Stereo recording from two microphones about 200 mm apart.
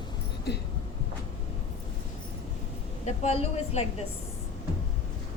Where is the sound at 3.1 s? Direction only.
30° left (ahead or behind).